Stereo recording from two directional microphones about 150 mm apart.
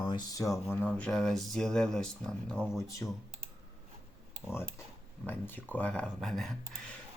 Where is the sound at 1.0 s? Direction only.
5° left (ahead or behind).